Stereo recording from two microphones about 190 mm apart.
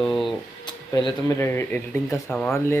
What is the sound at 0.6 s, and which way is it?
A man's voice, 20° left (ahead or behind).